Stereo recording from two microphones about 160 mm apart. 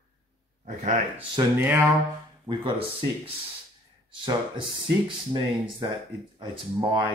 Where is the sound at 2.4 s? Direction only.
30° right (ahead or behind).